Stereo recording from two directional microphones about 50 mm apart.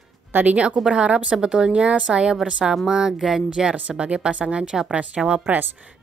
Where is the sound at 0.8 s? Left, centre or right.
Right; by 3.4 s centre.